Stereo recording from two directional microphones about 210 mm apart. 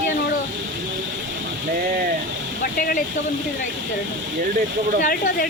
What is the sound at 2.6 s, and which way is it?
Speech, 45° left (ahead or behind).